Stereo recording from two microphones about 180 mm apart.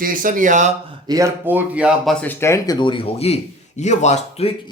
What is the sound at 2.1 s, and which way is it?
A man's voice, 10° left (ahead or behind).